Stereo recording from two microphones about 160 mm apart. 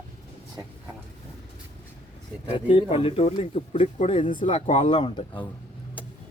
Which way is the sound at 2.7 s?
35° left (ahead or behind).